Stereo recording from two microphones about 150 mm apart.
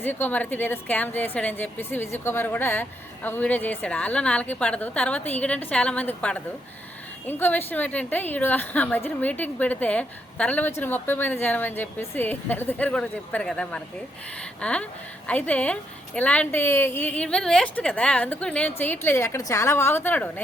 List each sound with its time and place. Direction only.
0.0 s a woman's voice: 10° left (ahead or behind)